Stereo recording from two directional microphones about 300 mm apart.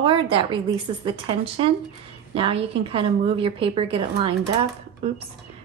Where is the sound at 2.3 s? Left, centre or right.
Centre.